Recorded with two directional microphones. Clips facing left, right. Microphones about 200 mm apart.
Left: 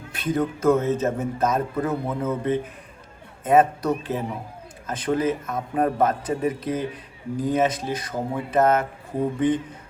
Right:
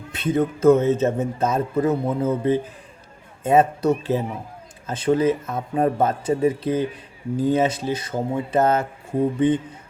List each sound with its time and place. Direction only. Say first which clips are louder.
0.1 s speech: right 3 dB; 25° right (ahead or behind)